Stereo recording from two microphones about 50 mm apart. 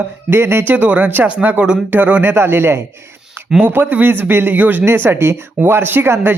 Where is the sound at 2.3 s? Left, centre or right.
Right.